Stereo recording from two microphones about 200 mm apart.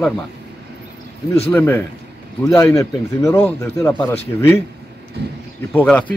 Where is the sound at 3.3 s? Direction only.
5° left (ahead or behind).